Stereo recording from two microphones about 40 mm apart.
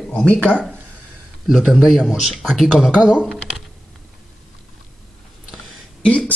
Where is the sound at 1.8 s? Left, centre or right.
Centre.